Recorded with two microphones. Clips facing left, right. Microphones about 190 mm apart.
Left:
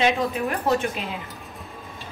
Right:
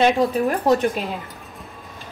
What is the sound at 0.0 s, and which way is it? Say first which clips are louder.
Speech: right 5 dB; 40° right (ahead or behind).